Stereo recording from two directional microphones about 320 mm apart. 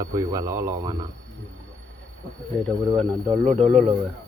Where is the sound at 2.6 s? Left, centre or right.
Centre.